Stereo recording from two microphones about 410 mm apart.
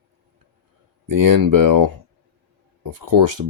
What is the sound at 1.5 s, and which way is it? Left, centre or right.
Speech, right.